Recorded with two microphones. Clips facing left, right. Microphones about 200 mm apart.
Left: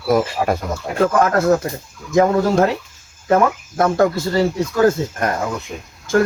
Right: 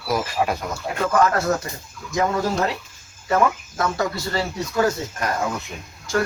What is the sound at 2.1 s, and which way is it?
Speech, 50° left (ahead or behind).